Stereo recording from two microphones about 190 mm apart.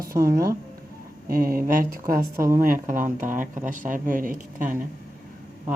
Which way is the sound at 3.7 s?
45° right (ahead or behind).